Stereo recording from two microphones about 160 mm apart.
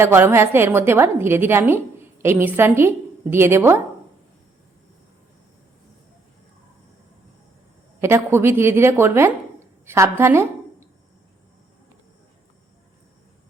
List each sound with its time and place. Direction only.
0.0 s a woman's voice: 15° right (ahead or behind)
8.0 s a woman's voice: 15° right (ahead or behind)